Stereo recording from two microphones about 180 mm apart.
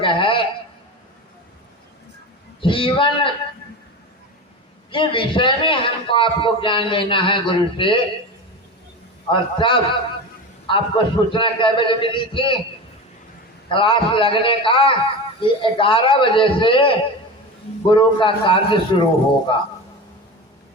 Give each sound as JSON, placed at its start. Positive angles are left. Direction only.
{"t": 0.0, "sound": "a sound", "side_deg": 30}
{"t": 2.6, "sound": "a man's voice", "side_deg": 30}
{"t": 4.9, "sound": "a man's voice", "side_deg": 30}
{"t": 9.3, "sound": "a man's voice", "side_deg": 30}
{"t": 13.7, "sound": "a man's voice", "side_deg": 30}